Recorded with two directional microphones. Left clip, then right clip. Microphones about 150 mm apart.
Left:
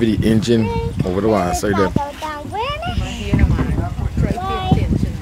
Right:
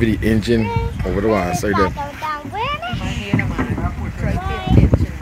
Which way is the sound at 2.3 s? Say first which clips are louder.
Right 1 dB; 55° left (ahead or behind).